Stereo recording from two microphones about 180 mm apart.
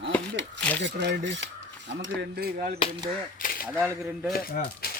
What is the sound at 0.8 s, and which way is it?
Cutlery, 75° right (ahead or behind).